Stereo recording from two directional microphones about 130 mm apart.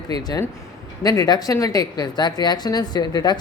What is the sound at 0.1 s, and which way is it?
A woman's voice, 30° left (ahead or behind).